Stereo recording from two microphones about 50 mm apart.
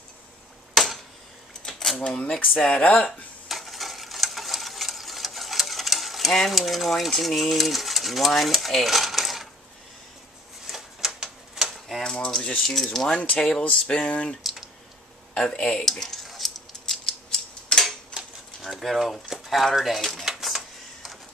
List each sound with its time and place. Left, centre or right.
0.7 s a sound: centre
2.0 s speech: left
3.1 s stir: centre
8.3 s coin: centre
10.7 s typewriter: centre
12.2 s speech: centre
12.6 s speech: centre
13.4 s speech: centre
14.4 s typing: centre
15.5 s a sound: centre
19.6 s speech: centre
20.2 s a sound: centre